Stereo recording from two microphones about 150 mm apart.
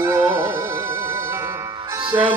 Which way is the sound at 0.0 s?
20° right (ahead or behind).